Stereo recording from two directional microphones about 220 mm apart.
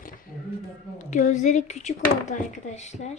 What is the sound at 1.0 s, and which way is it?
Speech, 35° left (ahead or behind).